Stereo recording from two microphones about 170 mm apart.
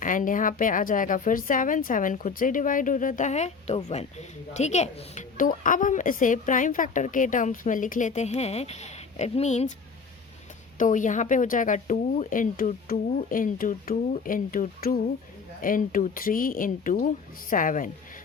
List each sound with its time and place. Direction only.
0.0 s speech: 50° left (ahead or behind)
10.8 s speech: 50° left (ahead or behind)